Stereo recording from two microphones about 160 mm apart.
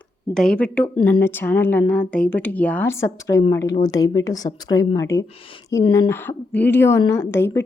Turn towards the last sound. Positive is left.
turn(degrees=15)  # may be behind; listen again after turning